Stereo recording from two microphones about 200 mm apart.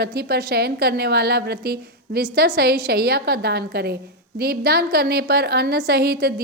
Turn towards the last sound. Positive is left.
turn(degrees=-50)  # may be behind; listen again after turning